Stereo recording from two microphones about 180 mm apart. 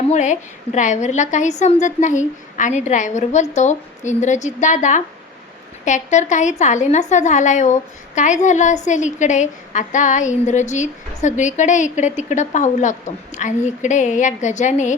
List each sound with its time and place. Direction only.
0.1 s a woman's voice: 40° left (ahead or behind)